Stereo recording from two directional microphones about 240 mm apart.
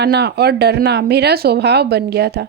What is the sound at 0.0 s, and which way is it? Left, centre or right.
A woman's voice, right.